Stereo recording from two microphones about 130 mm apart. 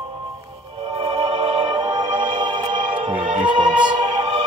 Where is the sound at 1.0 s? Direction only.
55° right (ahead or behind).